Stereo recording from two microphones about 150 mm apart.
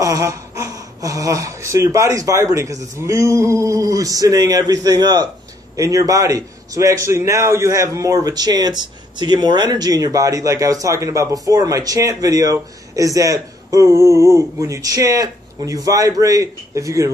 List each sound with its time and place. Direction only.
0.0 s speech: 20° right (ahead or behind)